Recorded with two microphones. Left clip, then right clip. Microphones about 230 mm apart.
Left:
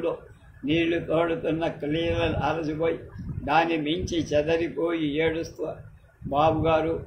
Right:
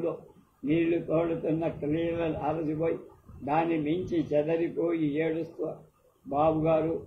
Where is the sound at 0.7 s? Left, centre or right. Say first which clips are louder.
Left 3 dB; left.